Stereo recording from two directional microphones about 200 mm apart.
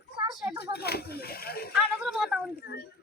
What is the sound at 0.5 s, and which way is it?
Speech, 55° left (ahead or behind).